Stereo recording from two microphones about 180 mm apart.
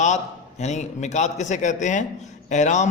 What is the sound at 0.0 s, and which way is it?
A man's voice, 40° left (ahead or behind).